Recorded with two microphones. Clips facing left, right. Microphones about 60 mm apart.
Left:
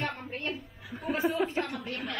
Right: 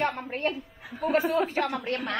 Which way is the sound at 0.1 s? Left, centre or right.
Right.